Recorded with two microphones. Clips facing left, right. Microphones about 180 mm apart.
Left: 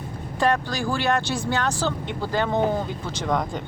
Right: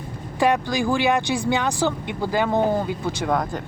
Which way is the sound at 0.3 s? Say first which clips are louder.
Right 3 dB; 15° right (ahead or behind).